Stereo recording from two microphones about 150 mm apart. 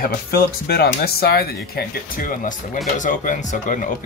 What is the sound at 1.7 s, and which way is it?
Speech, 70° left (ahead or behind).